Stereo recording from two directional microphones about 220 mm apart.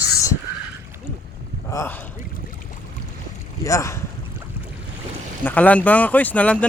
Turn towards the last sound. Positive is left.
turn(degrees=5)  # may be behind; listen again after turning